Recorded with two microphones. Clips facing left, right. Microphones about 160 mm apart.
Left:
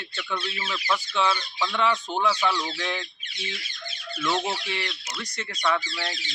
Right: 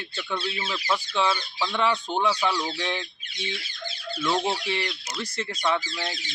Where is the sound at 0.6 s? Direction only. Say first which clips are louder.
Left 1 dB; 25° right (ahead or behind).